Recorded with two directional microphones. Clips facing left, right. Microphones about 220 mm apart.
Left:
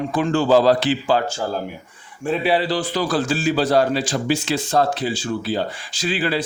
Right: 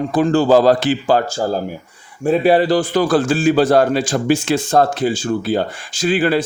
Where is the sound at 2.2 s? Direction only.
45° right (ahead or behind).